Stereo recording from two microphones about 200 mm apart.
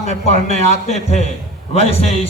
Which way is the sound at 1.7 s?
30° left (ahead or behind).